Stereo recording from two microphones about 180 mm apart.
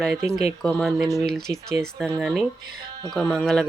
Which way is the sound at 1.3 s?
Centre (ahead or behind).